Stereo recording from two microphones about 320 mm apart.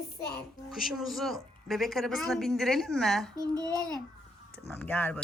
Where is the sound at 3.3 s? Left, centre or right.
Centre.